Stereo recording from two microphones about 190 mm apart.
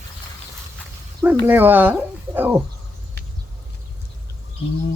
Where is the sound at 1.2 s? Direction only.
10° right (ahead or behind).